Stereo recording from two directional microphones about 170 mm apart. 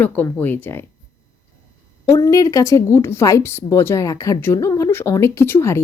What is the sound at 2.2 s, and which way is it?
Speech, 20° left (ahead or behind).